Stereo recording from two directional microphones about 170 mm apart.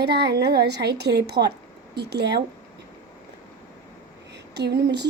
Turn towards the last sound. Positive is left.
turn(degrees=-85)